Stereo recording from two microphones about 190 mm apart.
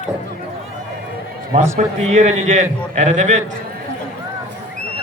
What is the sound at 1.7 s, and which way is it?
A man's voice, 35° right (ahead or behind).